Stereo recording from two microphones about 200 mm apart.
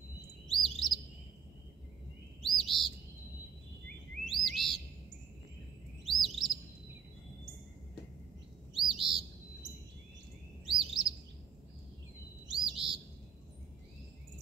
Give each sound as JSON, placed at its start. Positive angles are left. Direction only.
{"t": 0.5, "sound": "chirp", "side_deg": 0}
{"t": 2.4, "sound": "bird", "side_deg": 0}
{"t": 4.2, "sound": "bird", "side_deg": 0}
{"t": 6.0, "sound": "chirp", "side_deg": 0}
{"t": 8.7, "sound": "bird", "side_deg": 0}
{"t": 10.7, "sound": "chirp", "side_deg": 0}
{"t": 12.4, "sound": "bird", "side_deg": 0}